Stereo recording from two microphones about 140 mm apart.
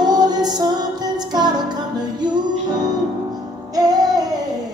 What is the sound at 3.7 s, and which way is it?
Music, 30° right (ahead or behind).